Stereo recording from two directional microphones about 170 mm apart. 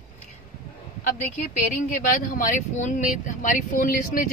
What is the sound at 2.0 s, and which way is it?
Speech, 55° left (ahead or behind).